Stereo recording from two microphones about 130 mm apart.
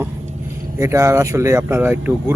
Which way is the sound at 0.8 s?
20° right (ahead or behind).